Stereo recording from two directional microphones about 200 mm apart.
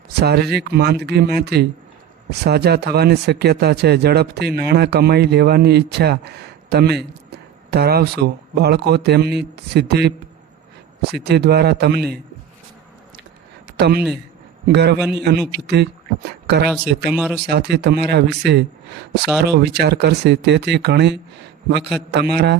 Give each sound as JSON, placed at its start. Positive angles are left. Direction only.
{"t": 0.2, "sound": "a man's voice", "side_deg": -55}
{"t": 11.1, "sound": "speech", "side_deg": -55}
{"t": 13.7, "sound": "a man's voice", "side_deg": -55}
{"t": 17.0, "sound": "speech", "side_deg": -5}
{"t": 17.5, "sound": "a man's voice", "side_deg": -55}